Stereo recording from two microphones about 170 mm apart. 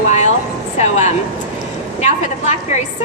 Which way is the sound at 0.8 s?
45° left (ahead or behind).